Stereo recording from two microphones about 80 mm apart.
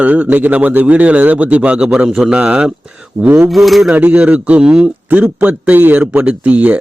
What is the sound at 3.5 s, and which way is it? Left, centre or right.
Speech, centre.